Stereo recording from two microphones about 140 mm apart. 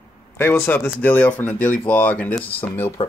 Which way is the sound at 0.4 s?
15° left (ahead or behind).